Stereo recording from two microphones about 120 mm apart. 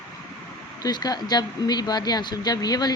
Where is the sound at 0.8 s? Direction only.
35° left (ahead or behind).